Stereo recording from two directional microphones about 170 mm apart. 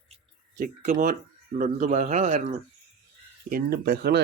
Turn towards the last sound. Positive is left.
turn(degrees=-70)  # may be behind; listen again after turning